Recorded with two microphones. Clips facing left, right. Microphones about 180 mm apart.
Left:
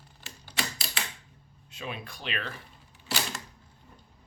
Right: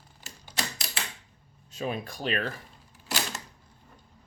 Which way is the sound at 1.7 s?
40° right (ahead or behind).